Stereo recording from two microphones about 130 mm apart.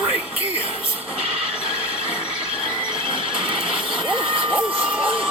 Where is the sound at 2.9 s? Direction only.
40° right (ahead or behind).